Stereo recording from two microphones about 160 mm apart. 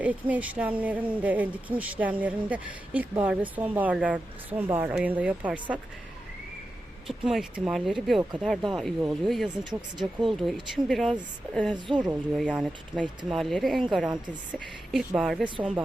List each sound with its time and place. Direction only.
0.0 s speech: 10° right (ahead or behind)
7.1 s a woman's voice: centre (ahead or behind)
15.4 s speech: 30° right (ahead or behind)